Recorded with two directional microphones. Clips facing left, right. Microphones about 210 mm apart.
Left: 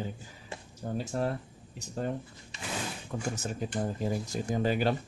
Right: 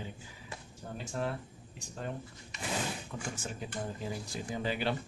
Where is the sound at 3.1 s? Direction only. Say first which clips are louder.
Left 6 dB; 45° left (ahead or behind).